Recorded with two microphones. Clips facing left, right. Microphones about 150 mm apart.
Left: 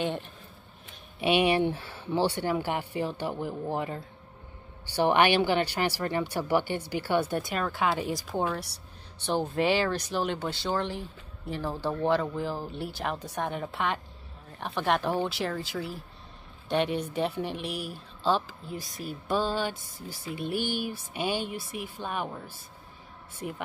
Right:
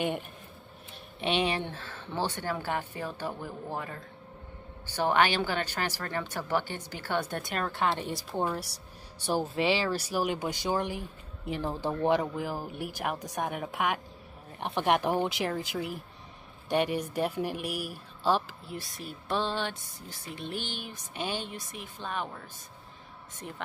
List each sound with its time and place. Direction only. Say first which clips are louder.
1.2 s a woman's voice: left 5 dB; 10° left (ahead or behind)
23.4 s speech: left 6 dB; 10° left (ahead or behind)